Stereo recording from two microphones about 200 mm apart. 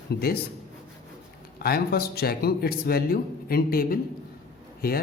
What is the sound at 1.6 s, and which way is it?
Speech, 50° left (ahead or behind).